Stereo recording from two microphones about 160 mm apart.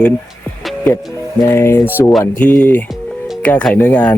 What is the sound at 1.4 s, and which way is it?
Speech, 15° left (ahead or behind).